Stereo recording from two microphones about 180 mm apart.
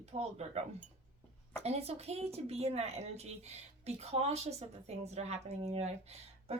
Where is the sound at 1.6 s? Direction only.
35° right (ahead or behind).